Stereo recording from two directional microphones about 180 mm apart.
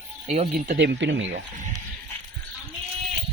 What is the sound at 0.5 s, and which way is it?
Speech, 50° right (ahead or behind).